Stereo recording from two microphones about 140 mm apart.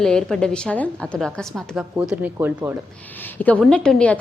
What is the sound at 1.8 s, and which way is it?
Speech, 10° right (ahead or behind).